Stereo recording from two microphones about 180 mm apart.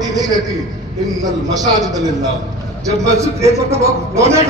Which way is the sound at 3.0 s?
15° right (ahead or behind).